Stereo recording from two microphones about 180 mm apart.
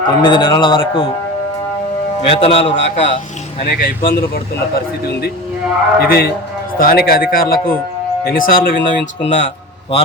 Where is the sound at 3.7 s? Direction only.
55° left (ahead or behind).